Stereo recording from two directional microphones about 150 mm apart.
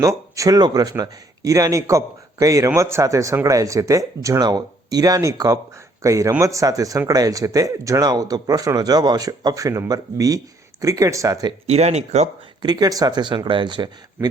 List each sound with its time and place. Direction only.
0.0 s speech: 20° right (ahead or behind)
11.6 s speech: 45° right (ahead or behind)
12.6 s speech: 25° right (ahead or behind)